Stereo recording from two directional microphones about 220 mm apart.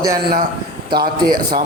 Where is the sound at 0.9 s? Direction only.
45° right (ahead or behind).